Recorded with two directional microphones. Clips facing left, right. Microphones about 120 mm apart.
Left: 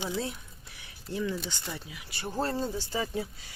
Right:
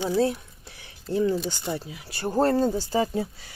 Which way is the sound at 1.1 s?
35° right (ahead or behind).